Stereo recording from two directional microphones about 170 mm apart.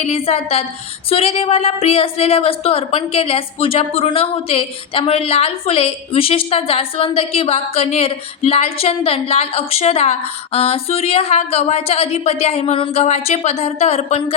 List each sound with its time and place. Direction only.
0.0 s a woman's voice: 35° left (ahead or behind)